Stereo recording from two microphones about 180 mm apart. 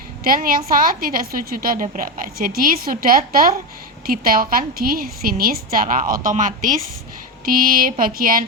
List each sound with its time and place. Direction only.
0.3 s a woman's voice: 55° right (ahead or behind)